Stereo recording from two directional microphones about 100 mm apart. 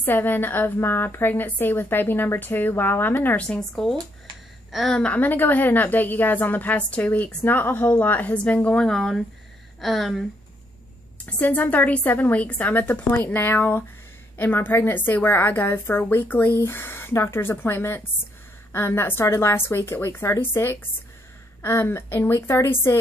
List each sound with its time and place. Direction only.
0.0 s a woman's voice: 20° left (ahead or behind); by 10.2 s centre (ahead or behind)
11.2 s a woman's voice: 15° left (ahead or behind)